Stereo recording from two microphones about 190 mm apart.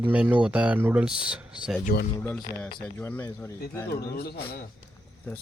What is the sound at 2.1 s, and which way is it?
Speech, 10° left (ahead or behind).